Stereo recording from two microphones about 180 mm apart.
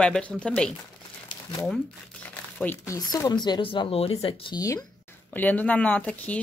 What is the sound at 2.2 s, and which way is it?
Crumpling, 10° left (ahead or behind).